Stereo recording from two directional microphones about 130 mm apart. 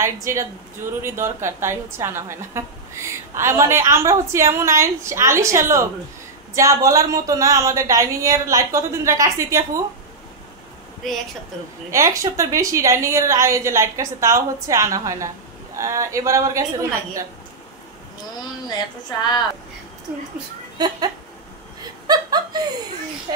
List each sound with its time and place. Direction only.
0.0 s a woman's voice: 25° right (ahead or behind)
11.0 s speech: centre (ahead or behind)
11.9 s a woman's voice: 25° right (ahead or behind)
19.0 s speech: 35° left (ahead or behind)
20.7 s speech: 30° right (ahead or behind)